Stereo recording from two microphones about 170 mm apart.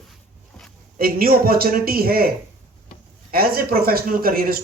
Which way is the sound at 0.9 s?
60° right (ahead or behind).